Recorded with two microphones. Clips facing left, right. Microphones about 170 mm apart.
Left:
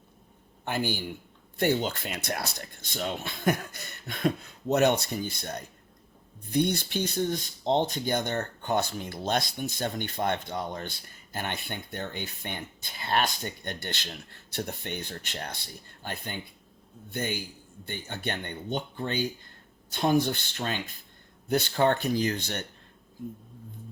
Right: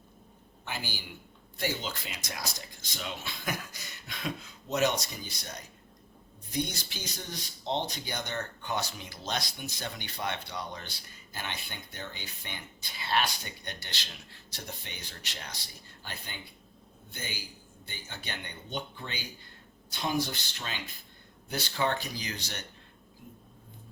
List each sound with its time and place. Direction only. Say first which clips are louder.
0.6 s a man's voice: left 10 dB; 55° left (ahead or behind)